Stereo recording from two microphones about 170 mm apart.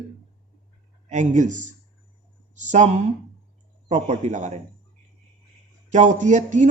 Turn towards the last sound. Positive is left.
turn(degrees=-45)  # may be behind; listen again after turning